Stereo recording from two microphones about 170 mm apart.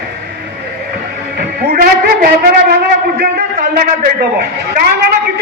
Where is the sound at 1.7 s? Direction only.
60° right (ahead or behind).